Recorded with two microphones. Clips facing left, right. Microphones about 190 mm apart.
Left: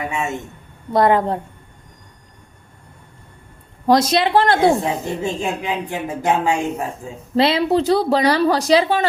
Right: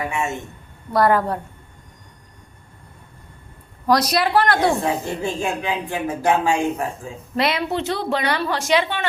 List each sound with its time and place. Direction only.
0.9 s a woman's voice: 20° left (ahead or behind)
3.8 s a woman's voice: 25° left (ahead or behind)